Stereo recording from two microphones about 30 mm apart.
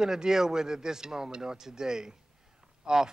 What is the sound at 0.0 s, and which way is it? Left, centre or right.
Speech, right.